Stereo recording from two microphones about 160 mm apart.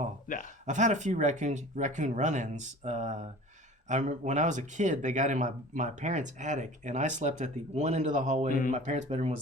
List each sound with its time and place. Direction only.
0.3 s speech: 55° left (ahead or behind)
0.6 s speech: 50° right (ahead or behind)